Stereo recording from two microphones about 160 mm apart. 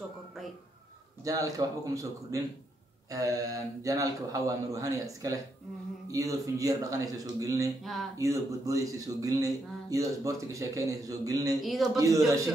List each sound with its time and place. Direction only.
1.2 s speech: 20° right (ahead or behind)
7.8 s a man's voice: centre (ahead or behind)
8.2 s speech: 20° right (ahead or behind)
11.6 s a man's voice: centre (ahead or behind)